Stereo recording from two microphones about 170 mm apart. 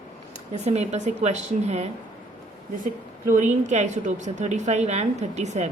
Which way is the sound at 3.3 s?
45° right (ahead or behind).